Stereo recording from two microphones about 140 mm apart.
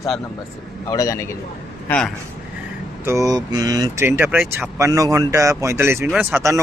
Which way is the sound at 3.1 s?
25° right (ahead or behind).